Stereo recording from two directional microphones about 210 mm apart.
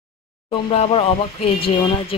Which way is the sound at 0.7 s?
30° left (ahead or behind).